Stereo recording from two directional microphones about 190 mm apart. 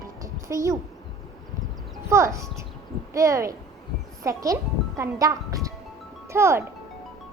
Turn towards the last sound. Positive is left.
turn(degrees=-15)  # may be behind; listen again after turning